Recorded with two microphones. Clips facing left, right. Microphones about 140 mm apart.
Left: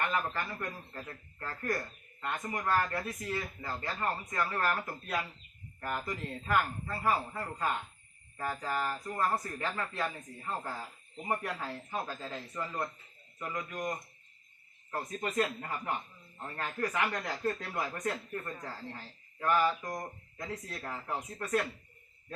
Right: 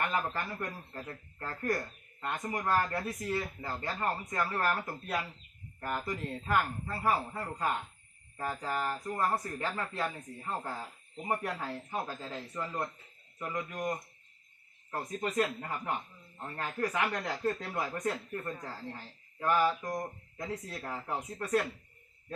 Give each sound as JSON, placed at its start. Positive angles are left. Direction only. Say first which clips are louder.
{"t": 0.0, "sound": "a man's voice", "louder": "even", "side_deg": -15}
{"t": 3.9, "sound": "speech", "louder": "right 1 dB", "side_deg": -10}